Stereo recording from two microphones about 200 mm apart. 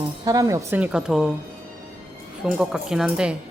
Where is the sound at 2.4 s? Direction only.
5° right (ahead or behind).